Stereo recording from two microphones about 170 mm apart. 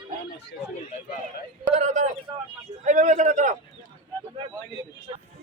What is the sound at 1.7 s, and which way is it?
A man's voice, 45° right (ahead or behind).